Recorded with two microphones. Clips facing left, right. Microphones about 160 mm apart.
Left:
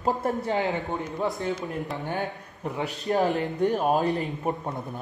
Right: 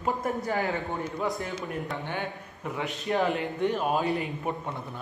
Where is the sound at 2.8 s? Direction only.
40° left (ahead or behind).